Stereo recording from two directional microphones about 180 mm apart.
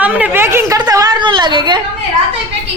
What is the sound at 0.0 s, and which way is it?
A woman's voice, 10° right (ahead or behind).